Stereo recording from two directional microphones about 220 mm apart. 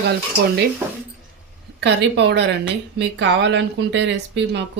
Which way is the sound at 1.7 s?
50° right (ahead or behind).